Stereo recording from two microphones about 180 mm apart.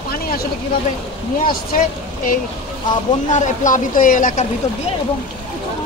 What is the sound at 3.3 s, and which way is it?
Speech, 40° left (ahead or behind).